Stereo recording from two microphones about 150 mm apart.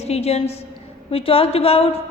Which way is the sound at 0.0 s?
45° left (ahead or behind).